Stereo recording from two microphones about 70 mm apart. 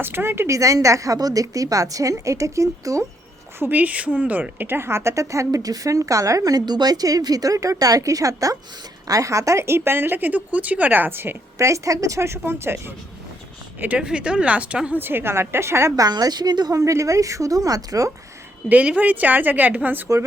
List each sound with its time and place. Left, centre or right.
0.0 s a woman's voice: right
0.5 s a woman's voice: right
3.6 s a woman's voice: right
11.5 s a woman's voice: right
13.7 s speech: right
14.9 s a woman's voice: right
16.0 s a woman's voice: right
16.7 s a woman's voice: right
18.7 s a woman's voice: right